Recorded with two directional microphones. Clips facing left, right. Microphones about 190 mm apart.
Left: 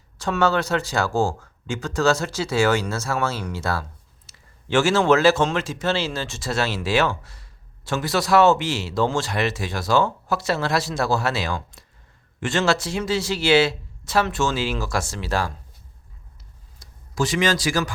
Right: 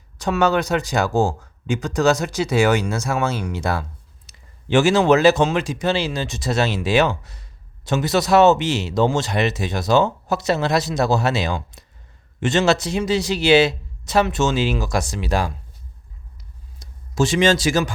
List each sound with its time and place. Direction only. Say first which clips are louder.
0.2 s speech: right 2 dB; 15° right (ahead or behind)
16.8 s speech: right 4 dB; 25° right (ahead or behind)